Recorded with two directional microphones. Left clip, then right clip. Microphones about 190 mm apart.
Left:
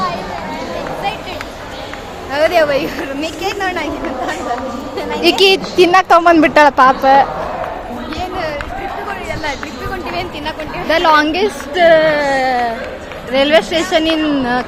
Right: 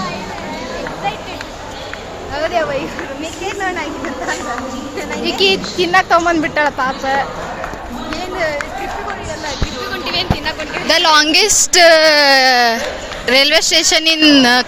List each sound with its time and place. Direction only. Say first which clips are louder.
2.3 s a woman's voice: left 5 dB; 50° left (ahead or behind)
5.2 s speech: left 4 dB; 40° left (ahead or behind)
5.7 s speech: left 4 dB; 30° left (ahead or behind)
10.8 s a woman's voice: even; centre (ahead or behind)
11.3 s a woman's voice: right 4 dB; 20° right (ahead or behind)